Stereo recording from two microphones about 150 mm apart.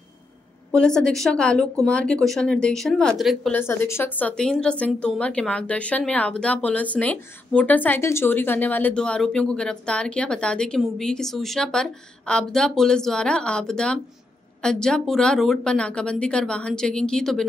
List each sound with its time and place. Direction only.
0.7 s a woman's voice: 5° left (ahead or behind)
3.5 s a woman's voice: 15° left (ahead or behind)